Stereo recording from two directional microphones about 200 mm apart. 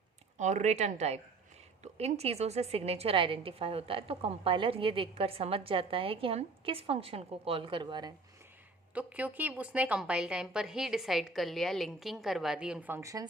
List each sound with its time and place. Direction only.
0.3 s a woman's voice: 35° right (ahead or behind)
9.0 s a woman's voice: 5° right (ahead or behind)